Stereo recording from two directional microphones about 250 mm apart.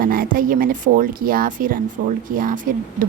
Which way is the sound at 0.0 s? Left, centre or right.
Right.